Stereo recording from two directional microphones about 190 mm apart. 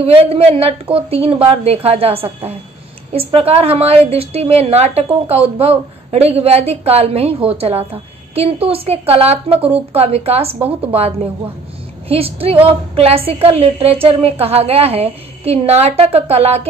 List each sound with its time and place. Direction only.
0.0 s a woman's voice: 30° right (ahead or behind)